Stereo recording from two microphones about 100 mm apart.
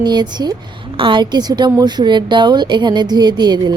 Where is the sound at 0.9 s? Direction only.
55° right (ahead or behind).